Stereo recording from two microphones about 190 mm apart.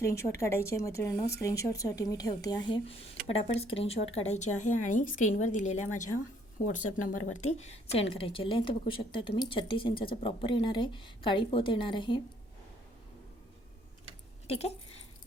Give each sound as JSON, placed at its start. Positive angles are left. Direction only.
{"t": 0.0, "sound": "a woman's voice", "side_deg": 15}